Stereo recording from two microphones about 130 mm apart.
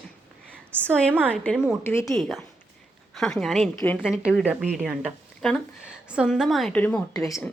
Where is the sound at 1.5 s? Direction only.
5° right (ahead or behind).